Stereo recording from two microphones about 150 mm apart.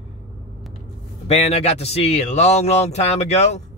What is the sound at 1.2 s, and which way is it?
Speech, 45° left (ahead or behind).